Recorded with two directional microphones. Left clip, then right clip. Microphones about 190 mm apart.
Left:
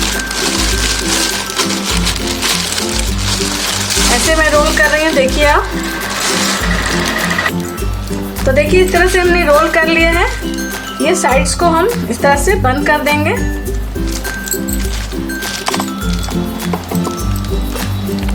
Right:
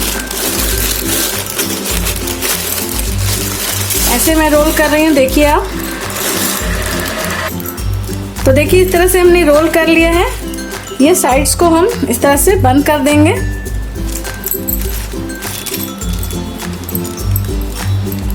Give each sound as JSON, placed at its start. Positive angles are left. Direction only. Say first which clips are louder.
{"t": 4.3, "sound": "speech", "louder": "right 3 dB", "side_deg": -50}
{"t": 8.4, "sound": "speech", "louder": "right 1 dB", "side_deg": -60}